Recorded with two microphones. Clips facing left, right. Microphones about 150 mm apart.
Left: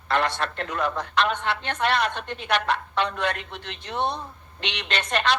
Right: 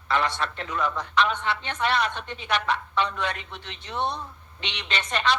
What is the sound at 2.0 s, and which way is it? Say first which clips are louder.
Speech: left 2 dB; 65° left (ahead or behind).